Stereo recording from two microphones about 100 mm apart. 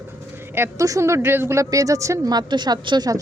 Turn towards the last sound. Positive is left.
turn(degrees=-45)  # may be behind; listen again after turning